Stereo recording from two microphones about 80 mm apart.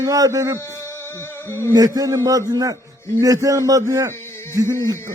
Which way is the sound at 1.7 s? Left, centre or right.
Right.